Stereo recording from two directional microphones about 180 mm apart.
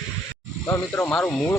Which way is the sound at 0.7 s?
15° left (ahead or behind).